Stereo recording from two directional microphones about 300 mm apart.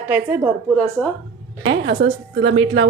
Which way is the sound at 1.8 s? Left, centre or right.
Right.